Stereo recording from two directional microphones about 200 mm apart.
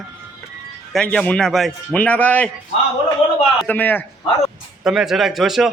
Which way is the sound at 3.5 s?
10° left (ahead or behind).